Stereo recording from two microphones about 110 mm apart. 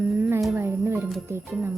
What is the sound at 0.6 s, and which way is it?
Speech, 25° right (ahead or behind).